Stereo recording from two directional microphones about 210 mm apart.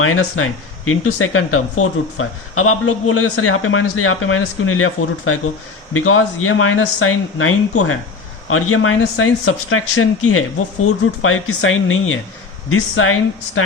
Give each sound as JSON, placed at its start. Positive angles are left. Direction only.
{"t": 0.0, "sound": "speech", "side_deg": 75}
{"t": 11.2, "sound": "speech", "side_deg": 80}